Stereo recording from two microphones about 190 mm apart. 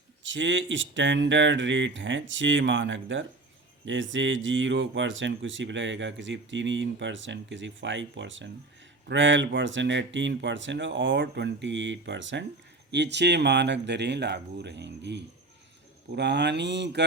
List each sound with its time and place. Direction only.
0.2 s speech: 75° right (ahead or behind)